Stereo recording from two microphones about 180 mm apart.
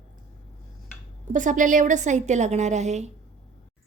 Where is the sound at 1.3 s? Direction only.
45° right (ahead or behind).